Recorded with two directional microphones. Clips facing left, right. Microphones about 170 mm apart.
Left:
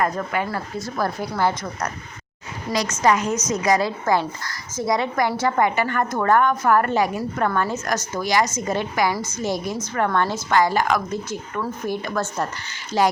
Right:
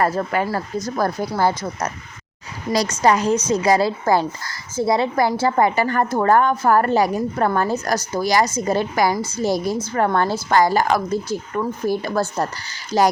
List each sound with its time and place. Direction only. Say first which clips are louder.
0.2 s a woman's voice: right 4 dB; 35° right (ahead or behind)
2.7 s a woman's voice: right 2 dB; 35° right (ahead or behind)